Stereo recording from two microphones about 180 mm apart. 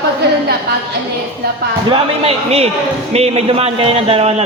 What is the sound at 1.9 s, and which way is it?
A man's voice, 35° right (ahead or behind).